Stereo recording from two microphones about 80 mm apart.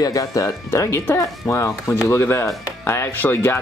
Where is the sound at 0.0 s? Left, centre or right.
Left.